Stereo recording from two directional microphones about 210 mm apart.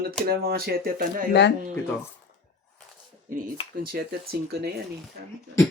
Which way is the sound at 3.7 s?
45° right (ahead or behind).